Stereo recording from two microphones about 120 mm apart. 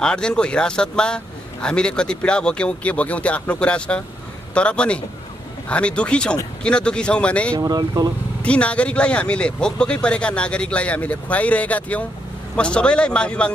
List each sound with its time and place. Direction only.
0.0 s a man's voice: 5° left (ahead or behind)
7.5 s speech: 35° right (ahead or behind)
8.4 s a man's voice: 10° left (ahead or behind)